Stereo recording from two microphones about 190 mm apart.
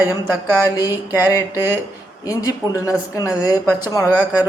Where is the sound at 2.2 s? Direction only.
15° left (ahead or behind).